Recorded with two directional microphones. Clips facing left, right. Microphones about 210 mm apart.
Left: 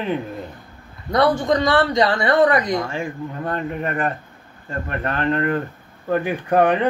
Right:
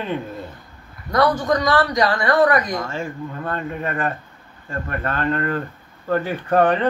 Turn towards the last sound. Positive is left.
turn(degrees=15)  # may be behind; listen again after turning